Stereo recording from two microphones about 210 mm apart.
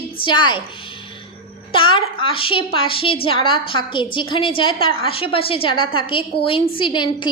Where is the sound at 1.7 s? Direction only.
25° left (ahead or behind).